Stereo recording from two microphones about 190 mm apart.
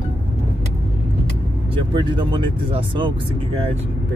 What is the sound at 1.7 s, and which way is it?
Speech, 25° right (ahead or behind).